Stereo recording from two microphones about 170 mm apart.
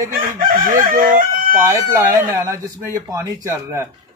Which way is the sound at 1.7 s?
15° right (ahead or behind).